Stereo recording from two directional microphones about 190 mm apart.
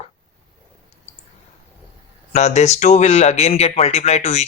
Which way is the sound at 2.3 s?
35° left (ahead or behind).